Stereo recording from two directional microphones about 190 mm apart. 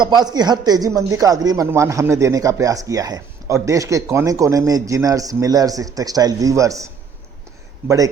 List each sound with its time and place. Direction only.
0.0 s speech: 20° right (ahead or behind)